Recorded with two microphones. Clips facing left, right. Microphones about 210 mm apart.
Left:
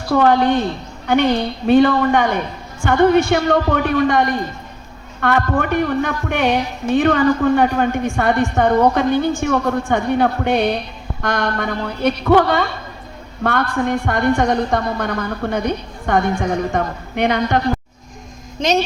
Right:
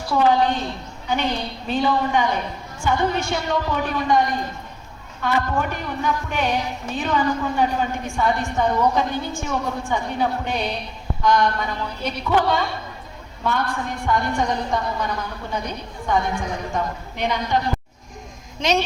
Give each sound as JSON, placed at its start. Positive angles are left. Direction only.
{"t": 0.1, "sound": "a woman's voice", "side_deg": 65}